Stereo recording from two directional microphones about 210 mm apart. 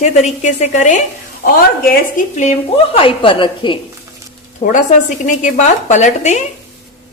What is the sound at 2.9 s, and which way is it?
Speech, 25° left (ahead or behind).